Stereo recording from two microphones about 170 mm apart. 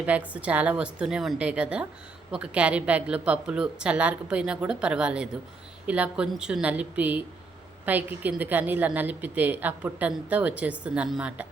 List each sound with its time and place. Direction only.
0.0 s a woman's voice: 10° right (ahead or behind)